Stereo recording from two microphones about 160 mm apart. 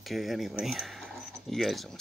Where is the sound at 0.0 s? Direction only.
Centre (ahead or behind).